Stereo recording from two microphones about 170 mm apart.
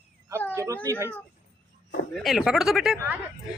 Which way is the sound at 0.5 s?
15° right (ahead or behind).